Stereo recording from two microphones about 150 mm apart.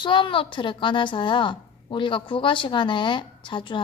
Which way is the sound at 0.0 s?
30° left (ahead or behind).